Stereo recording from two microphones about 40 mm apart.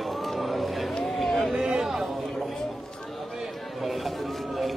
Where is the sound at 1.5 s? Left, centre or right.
Centre.